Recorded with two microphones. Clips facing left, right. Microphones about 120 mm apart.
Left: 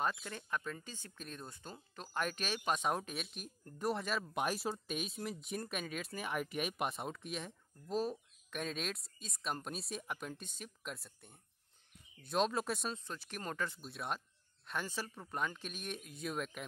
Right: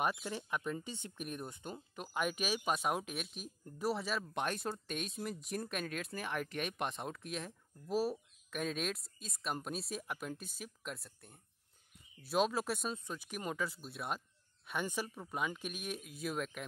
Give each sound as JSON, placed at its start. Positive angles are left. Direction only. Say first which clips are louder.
{"t": 0.0, "sound": "speech", "louder": "right 2 dB", "side_deg": -15}
{"t": 14.7, "sound": "speech", "louder": "right 3 dB", "side_deg": -15}